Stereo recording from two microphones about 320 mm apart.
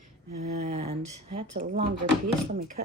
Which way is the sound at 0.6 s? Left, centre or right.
Centre.